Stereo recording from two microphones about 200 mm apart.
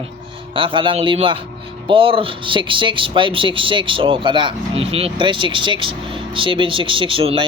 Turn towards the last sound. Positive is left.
turn(degrees=-25)  # may be behind; listen again after turning